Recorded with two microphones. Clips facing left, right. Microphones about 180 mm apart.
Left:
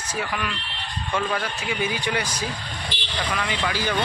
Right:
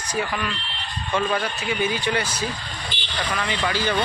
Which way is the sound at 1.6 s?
10° left (ahead or behind).